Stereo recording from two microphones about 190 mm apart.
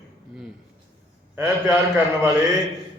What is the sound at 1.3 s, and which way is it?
A man's voice, 15° right (ahead or behind).